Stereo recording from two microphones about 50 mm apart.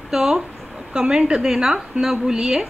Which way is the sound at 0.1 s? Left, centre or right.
Centre.